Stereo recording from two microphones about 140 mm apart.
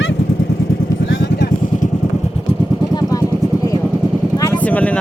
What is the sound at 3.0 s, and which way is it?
Vehicle, 25° left (ahead or behind).